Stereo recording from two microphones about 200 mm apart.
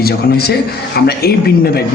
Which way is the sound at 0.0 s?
50° left (ahead or behind).